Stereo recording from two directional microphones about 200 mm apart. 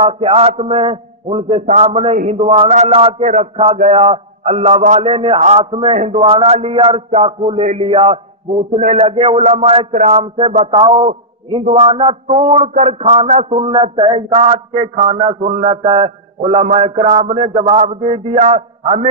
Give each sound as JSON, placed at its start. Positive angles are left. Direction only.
{"t": 0.0, "sound": "a man's voice", "side_deg": -30}